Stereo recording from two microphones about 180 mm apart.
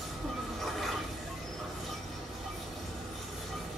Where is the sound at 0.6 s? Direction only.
Centre (ahead or behind).